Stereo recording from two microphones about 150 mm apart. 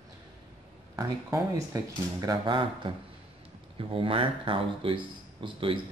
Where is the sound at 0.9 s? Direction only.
20° right (ahead or behind).